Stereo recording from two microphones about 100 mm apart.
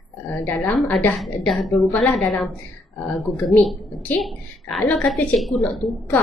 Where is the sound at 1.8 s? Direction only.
25° left (ahead or behind).